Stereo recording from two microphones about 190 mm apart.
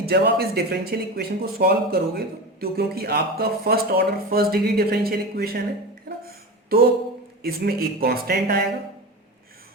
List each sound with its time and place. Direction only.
0.0 s speech: 55° right (ahead or behind)
6.2 s a sound: 50° right (ahead or behind)
7.4 s speech: 55° right (ahead or behind)